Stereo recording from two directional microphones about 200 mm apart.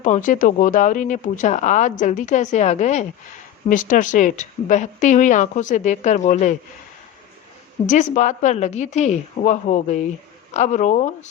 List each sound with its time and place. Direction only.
0.0 s speech: 40° left (ahead or behind)
7.9 s speech: 35° left (ahead or behind)